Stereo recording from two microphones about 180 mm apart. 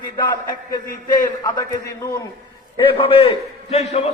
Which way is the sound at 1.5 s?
20° left (ahead or behind).